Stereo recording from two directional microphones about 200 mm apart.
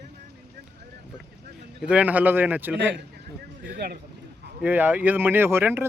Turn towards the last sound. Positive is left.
turn(degrees=-10)  # may be behind; listen again after turning